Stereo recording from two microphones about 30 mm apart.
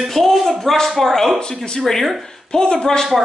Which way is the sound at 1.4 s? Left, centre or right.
Left.